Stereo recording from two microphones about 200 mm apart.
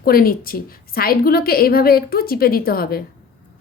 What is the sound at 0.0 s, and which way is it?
A woman's voice, 50° left (ahead or behind).